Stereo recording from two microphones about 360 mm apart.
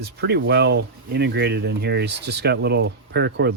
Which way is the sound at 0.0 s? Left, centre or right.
Right.